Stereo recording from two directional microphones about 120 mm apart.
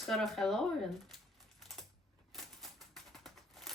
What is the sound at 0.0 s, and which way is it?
Speech, 5° left (ahead or behind).